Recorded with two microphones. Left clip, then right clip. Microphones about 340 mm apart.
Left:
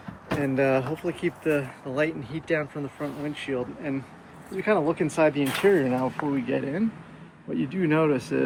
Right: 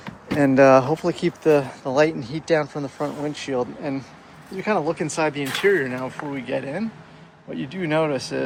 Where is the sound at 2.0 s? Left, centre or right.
Centre.